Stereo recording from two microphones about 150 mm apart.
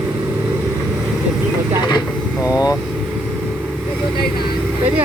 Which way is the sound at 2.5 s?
25° left (ahead or behind).